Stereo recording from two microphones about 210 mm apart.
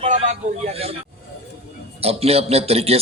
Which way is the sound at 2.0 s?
30° right (ahead or behind).